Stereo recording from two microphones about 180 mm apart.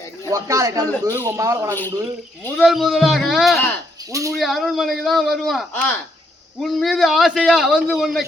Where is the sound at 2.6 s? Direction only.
Centre (ahead or behind).